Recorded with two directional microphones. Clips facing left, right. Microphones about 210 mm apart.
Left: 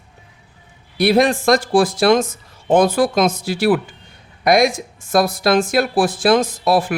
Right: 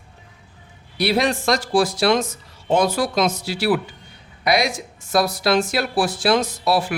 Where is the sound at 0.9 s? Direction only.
50° left (ahead or behind).